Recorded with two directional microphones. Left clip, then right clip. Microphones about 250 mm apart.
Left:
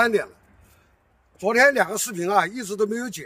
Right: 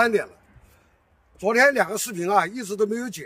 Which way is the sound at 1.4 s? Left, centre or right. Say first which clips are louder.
Left 1 dB; centre.